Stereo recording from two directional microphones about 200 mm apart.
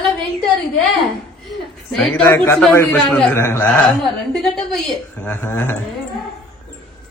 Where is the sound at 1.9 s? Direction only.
5° left (ahead or behind).